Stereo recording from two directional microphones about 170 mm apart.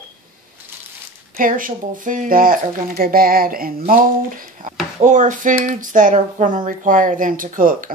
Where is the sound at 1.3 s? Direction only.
55° right (ahead or behind).